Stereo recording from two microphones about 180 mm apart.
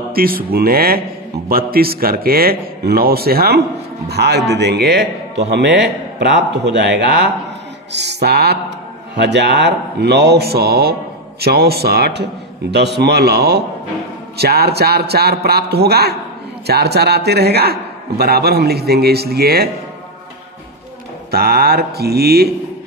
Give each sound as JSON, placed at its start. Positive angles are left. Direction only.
{"t": 0.1, "sound": "a man's voice", "side_deg": -55}
{"t": 21.3, "sound": "a man's voice", "side_deg": -55}